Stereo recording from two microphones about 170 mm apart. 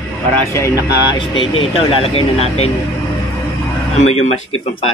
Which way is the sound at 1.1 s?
30° left (ahead or behind).